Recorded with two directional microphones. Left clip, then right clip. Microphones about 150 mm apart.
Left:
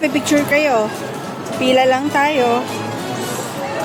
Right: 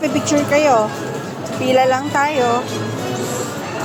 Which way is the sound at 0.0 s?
30° left (ahead or behind).